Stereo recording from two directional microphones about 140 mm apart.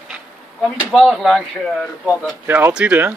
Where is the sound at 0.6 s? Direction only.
Centre (ahead or behind).